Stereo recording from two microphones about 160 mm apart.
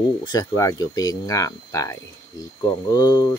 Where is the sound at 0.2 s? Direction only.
25° left (ahead or behind).